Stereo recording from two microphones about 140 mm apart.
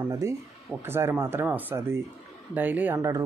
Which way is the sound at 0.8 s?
15° right (ahead or behind).